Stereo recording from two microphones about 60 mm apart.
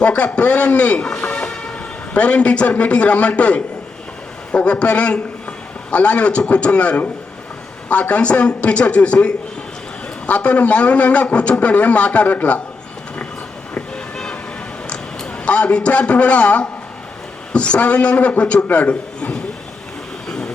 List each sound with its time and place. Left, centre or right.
0.0 s a man's voice: centre
14.8 s a man's voice: centre